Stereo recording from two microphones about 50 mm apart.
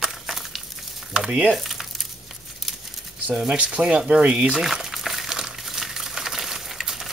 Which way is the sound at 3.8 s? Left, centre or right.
Centre.